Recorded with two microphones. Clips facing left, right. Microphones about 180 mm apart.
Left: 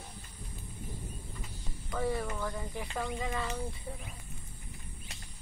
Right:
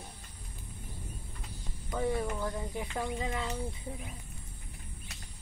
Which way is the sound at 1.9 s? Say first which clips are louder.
Right 1 dB; 20° right (ahead or behind).